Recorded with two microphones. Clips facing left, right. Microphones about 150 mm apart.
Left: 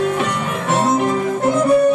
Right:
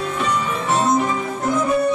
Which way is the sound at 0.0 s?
55° left (ahead or behind).